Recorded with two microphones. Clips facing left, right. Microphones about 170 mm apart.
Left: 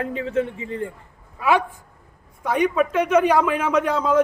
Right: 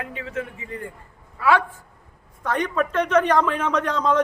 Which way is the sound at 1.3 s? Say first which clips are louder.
Even; 15° left (ahead or behind).